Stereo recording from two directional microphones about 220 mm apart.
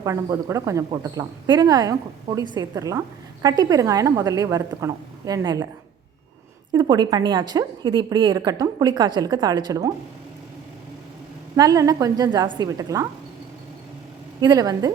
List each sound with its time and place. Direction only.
0.0 s speech: 15° right (ahead or behind)
6.7 s a woman's voice: 20° right (ahead or behind)
11.5 s speech: 15° right (ahead or behind)
14.4 s speech: 15° right (ahead or behind)